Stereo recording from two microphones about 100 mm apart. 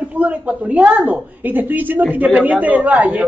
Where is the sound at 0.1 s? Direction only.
15° right (ahead or behind).